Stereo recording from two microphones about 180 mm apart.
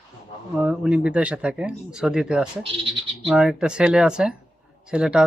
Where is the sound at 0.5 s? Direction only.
5° right (ahead or behind).